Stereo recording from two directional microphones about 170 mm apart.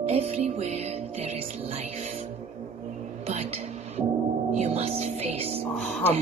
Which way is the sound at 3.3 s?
35° right (ahead or behind).